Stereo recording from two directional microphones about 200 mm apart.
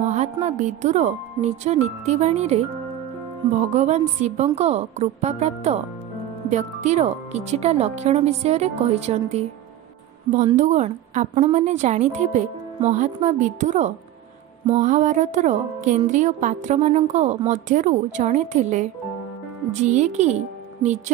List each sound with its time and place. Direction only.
0.0 s speech: 35° right (ahead or behind)
3.7 s speech: 35° right (ahead or behind)
10.5 s speech: 35° right (ahead or behind)